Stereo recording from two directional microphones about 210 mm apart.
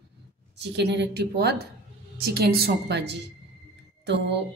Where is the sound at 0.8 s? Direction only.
55° right (ahead or behind).